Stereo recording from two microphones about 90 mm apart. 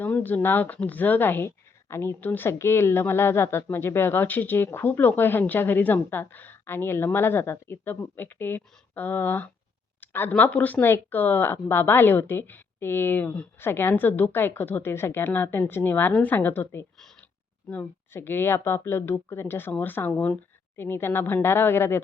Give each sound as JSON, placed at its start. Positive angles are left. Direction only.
{"t": 0.0, "sound": "speech", "side_deg": 20}